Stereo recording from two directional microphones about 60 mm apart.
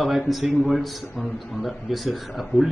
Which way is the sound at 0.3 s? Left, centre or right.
Centre.